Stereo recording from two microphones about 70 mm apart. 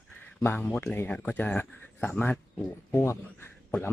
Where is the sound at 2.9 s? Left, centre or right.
Left.